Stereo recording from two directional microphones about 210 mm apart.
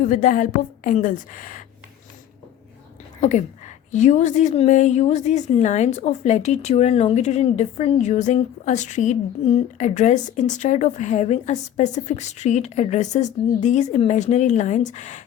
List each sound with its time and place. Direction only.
0.0 s a woman's voice: 40° left (ahead or behind)
3.2 s a woman's voice: 35° left (ahead or behind)